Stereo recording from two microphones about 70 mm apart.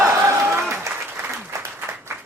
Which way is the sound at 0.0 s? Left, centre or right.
Right.